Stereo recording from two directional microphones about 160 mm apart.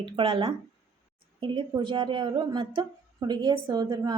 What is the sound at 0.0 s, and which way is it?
A woman's voice, 35° right (ahead or behind).